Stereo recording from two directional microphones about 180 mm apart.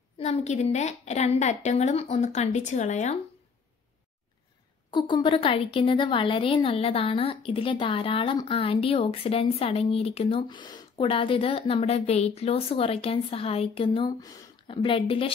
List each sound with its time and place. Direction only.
0.2 s a woman's voice: 35° left (ahead or behind)
4.9 s a woman's voice: 25° left (ahead or behind)